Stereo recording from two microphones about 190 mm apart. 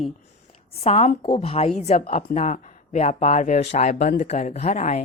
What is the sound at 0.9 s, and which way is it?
Speech, 35° left (ahead or behind).